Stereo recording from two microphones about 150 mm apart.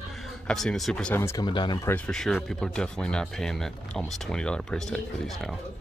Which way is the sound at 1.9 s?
5° left (ahead or behind).